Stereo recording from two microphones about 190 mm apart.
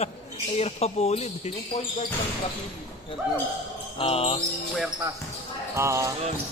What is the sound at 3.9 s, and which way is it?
Music, 30° left (ahead or behind).